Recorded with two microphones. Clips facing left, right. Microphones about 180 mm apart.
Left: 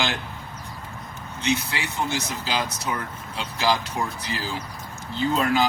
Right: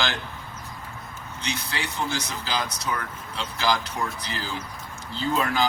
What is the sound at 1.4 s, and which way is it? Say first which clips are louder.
Speech: left 6 dB; 25° left (ahead or behind).